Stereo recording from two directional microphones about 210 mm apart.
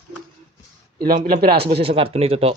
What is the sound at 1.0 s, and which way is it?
Speech, 45° right (ahead or behind).